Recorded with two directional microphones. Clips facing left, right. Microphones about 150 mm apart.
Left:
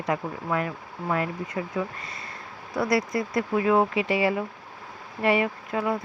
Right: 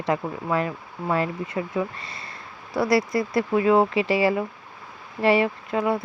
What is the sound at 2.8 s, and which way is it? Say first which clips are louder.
Speech: right 3 dB; 30° right (ahead or behind).